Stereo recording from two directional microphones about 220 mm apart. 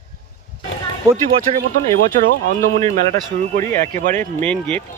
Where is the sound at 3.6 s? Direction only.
10° left (ahead or behind).